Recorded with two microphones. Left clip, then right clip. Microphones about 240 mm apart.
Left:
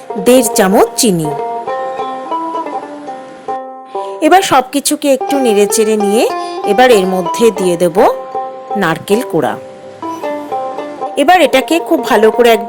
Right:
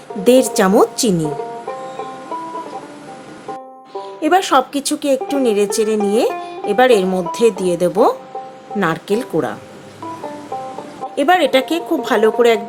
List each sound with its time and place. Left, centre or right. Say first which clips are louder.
0.3 s a woman's voice: left 3 dB; centre
1.2 s music: left 6 dB; left
4.2 s a woman's voice: left 5 dB; left
6.3 s music: left 7 dB; left
6.7 s a woman's voice: left 4 dB; left
11.1 s a woman's voice: left 5 dB; left